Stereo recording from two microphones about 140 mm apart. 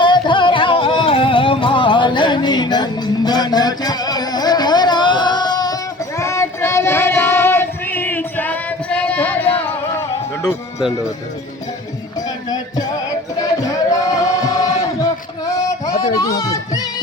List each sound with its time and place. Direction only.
0.0 s music: 35° left (ahead or behind)
6.1 s child singing: 20° left (ahead or behind)
13.4 s a sound: 25° left (ahead or behind)
16.4 s music: 25° left (ahead or behind)